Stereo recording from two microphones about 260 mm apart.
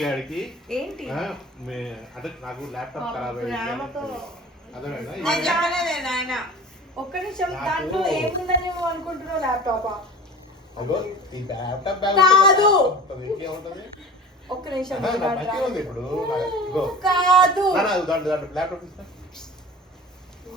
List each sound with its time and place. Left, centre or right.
0.0 s speech: centre
10.9 s speech: centre
14.4 s a woman's voice: centre
14.8 s speech: centre